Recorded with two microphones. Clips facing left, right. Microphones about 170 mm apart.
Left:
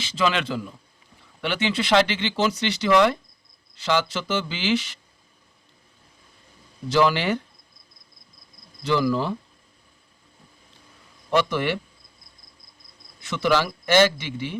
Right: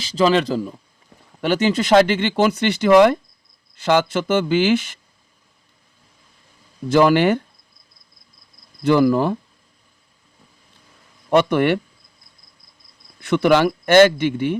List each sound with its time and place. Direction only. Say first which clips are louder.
0.0 s speech: right 7 dB; 35° right (ahead or behind)
6.8 s speech: right 6 dB; 50° right (ahead or behind)
8.8 s speech: right 7 dB; 50° right (ahead or behind)
11.3 s a man's voice: right 7 dB; 55° right (ahead or behind)
13.2 s a man's voice: right 7 dB; 55° right (ahead or behind)